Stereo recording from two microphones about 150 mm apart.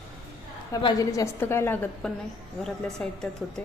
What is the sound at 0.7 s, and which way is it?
A woman's voice, 30° left (ahead or behind).